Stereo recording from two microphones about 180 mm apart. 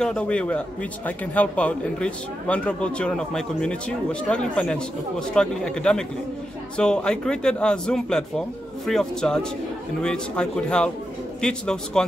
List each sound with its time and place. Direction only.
0.0 s a man's voice: 5° left (ahead or behind)